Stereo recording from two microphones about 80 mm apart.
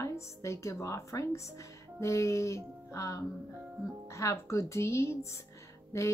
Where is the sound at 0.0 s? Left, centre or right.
Left.